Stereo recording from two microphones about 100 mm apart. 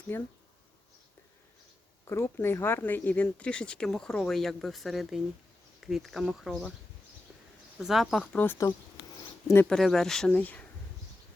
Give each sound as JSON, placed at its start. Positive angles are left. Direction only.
{"t": 0.1, "sound": "speech", "side_deg": 20}
{"t": 2.0, "sound": "speech", "side_deg": 25}
{"t": 7.8, "sound": "speech", "side_deg": -5}
{"t": 8.3, "sound": "speech", "side_deg": 15}
{"t": 9.6, "sound": "speech", "side_deg": 5}